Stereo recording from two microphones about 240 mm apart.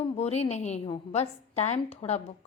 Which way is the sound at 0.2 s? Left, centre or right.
Left.